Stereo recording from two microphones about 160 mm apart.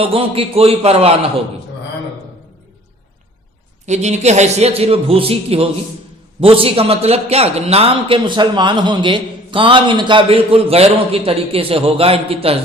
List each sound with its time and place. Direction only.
0.0 s a man's voice: 35° right (ahead or behind)
3.8 s a man's voice: 45° right (ahead or behind)